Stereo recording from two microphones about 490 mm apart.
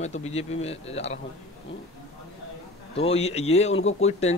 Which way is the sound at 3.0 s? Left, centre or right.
Centre.